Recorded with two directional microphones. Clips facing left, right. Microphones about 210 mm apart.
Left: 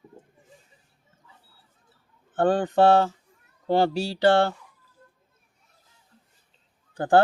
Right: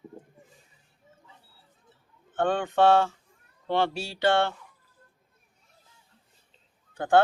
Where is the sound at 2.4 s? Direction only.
35° left (ahead or behind).